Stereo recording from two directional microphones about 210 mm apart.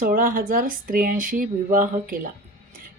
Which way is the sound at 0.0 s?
40° right (ahead or behind).